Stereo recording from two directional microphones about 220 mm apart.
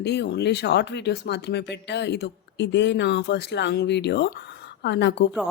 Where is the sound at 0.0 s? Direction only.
50° left (ahead or behind).